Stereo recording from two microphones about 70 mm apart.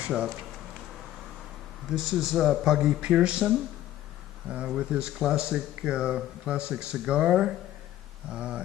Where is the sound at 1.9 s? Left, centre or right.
Centre.